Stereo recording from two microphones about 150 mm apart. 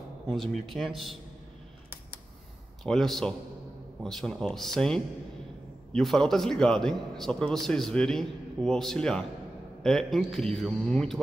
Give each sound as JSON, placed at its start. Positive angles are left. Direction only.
{"t": 0.3, "sound": "a man's voice", "side_deg": 0}
{"t": 2.8, "sound": "a man's voice", "side_deg": 0}